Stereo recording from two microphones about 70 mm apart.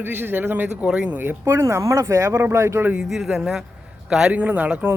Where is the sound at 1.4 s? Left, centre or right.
Right.